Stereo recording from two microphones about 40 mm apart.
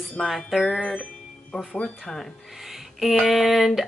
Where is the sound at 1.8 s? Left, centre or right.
Centre.